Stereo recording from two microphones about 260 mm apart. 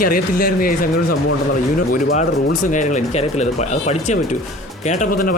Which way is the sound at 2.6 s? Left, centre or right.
Left.